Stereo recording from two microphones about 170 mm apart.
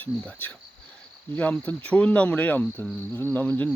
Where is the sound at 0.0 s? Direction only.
10° left (ahead or behind).